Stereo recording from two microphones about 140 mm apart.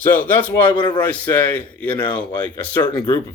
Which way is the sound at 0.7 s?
35° left (ahead or behind).